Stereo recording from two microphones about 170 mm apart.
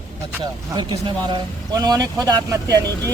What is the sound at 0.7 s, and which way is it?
Speech, 25° right (ahead or behind).